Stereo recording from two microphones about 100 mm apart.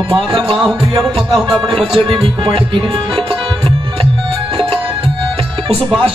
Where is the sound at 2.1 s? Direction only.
55° right (ahead or behind).